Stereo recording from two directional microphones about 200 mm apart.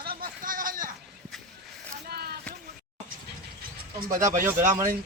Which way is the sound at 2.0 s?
50° right (ahead or behind).